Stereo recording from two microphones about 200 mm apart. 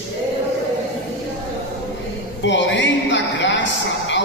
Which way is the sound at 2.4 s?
65° left (ahead or behind).